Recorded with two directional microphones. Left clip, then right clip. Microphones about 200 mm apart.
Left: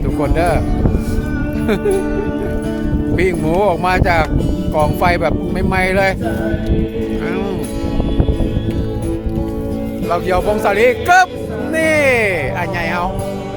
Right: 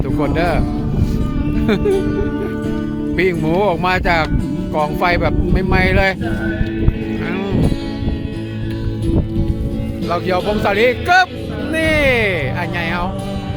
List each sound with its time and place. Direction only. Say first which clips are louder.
0.2 s speech: left 2 dB; 5° right (ahead or behind)
3.2 s speech: even; 5° right (ahead or behind)
10.1 s speech: left 2 dB; 10° right (ahead or behind)